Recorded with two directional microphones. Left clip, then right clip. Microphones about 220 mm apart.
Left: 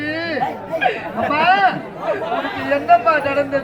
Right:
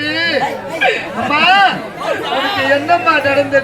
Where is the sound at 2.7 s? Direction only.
25° left (ahead or behind).